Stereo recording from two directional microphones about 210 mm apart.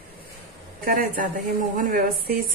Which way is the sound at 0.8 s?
40° right (ahead or behind).